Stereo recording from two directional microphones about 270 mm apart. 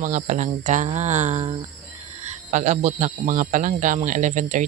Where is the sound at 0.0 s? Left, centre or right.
Right.